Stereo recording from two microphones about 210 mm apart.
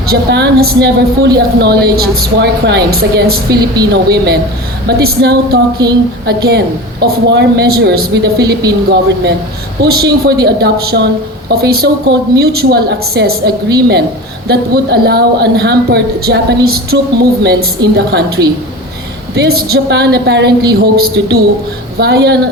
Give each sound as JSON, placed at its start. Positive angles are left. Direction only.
{"t": 0.1, "sound": "a woman's voice", "side_deg": -50}
{"t": 5.8, "sound": "a sound", "side_deg": -20}
{"t": 6.2, "sound": "a woman's voice", "side_deg": -50}